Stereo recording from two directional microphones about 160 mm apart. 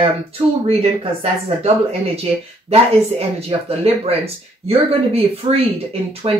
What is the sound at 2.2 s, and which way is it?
Speech, 40° right (ahead or behind).